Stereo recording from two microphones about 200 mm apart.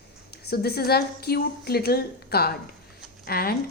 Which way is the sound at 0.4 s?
50° left (ahead or behind).